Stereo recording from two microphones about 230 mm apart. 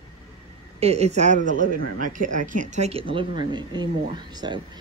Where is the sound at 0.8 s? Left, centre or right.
Right.